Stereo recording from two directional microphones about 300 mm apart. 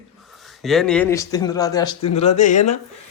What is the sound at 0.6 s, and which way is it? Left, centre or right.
Speech, centre.